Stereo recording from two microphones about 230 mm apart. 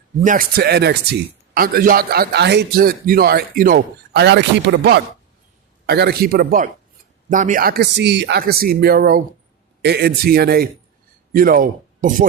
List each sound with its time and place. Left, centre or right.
0.2 s speech: right